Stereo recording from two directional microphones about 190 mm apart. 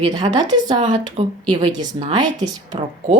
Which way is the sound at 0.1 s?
20° right (ahead or behind).